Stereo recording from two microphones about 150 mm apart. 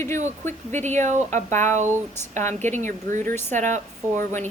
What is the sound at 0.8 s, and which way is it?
Speech, 50° right (ahead or behind).